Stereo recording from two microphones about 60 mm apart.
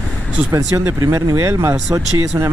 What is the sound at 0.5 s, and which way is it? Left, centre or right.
Speech, right.